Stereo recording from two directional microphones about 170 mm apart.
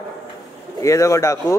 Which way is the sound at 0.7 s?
20° left (ahead or behind).